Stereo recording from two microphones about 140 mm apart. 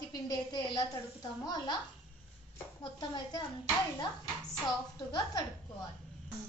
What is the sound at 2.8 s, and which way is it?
A woman's voice, 30° left (ahead or behind).